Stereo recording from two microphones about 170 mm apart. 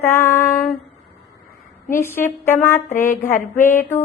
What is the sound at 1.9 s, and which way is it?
Female singing, 15° left (ahead or behind).